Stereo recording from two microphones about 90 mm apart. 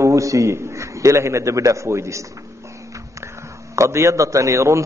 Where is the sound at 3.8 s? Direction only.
35° right (ahead or behind).